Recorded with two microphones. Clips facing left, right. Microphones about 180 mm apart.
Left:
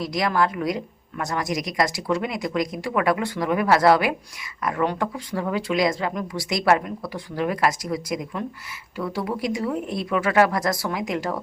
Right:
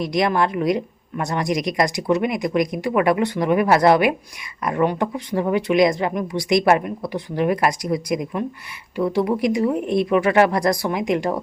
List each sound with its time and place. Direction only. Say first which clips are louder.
0.0 s speech: right 3 dB; 20° right (ahead or behind)